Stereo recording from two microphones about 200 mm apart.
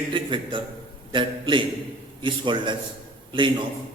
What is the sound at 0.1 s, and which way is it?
A man's voice, 25° right (ahead or behind).